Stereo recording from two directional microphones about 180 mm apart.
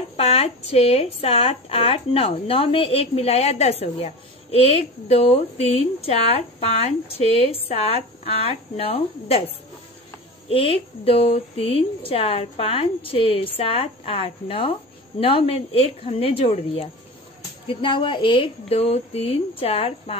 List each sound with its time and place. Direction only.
0.2 s a woman's voice: 35° left (ahead or behind)
10.5 s a woman's voice: 30° left (ahead or behind)